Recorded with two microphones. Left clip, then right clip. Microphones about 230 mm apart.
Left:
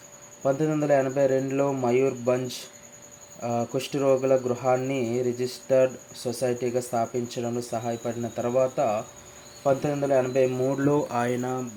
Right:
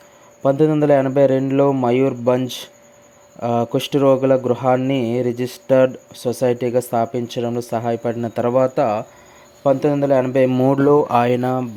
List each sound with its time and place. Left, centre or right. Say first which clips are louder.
0.4 s speech: right 9 dB; right